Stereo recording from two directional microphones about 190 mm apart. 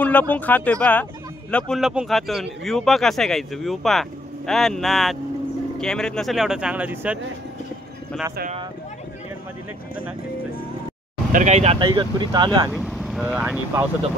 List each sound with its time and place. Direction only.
0.0 s speech: 10° left (ahead or behind); by 7.2 s 10° right (ahead or behind)
11.3 s speech: 35° right (ahead or behind)
12.7 s speech: centre (ahead or behind)